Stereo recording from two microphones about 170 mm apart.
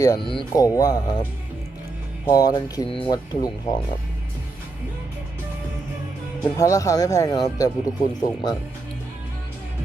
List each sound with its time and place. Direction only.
0.0 s speech: 25° left (ahead or behind)
2.2 s speech: 20° left (ahead or behind)
6.4 s speech: 20° left (ahead or behind)